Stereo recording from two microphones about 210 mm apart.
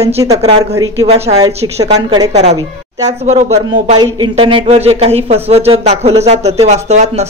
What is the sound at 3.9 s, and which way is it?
Speech, 20° right (ahead or behind).